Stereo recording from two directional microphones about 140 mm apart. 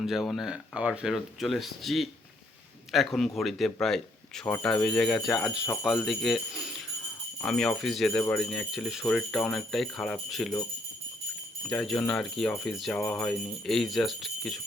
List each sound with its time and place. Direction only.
0.0 s speech: centre (ahead or behind)
11.7 s speech: centre (ahead or behind)